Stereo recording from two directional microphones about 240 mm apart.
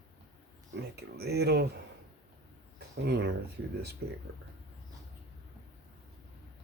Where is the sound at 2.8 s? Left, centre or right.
Right.